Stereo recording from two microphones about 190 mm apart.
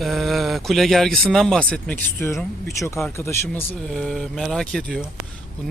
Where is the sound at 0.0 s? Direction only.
Centre (ahead or behind).